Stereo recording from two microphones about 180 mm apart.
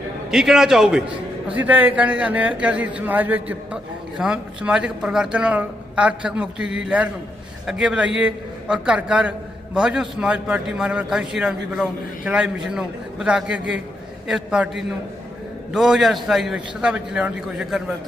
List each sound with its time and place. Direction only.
0.3 s a man's voice: 5° right (ahead or behind)